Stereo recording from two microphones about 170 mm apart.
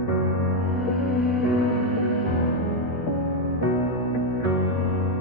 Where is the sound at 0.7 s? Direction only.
Centre (ahead or behind).